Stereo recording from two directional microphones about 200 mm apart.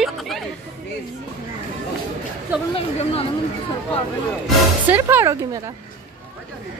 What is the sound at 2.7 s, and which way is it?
Speech, 30° left (ahead or behind).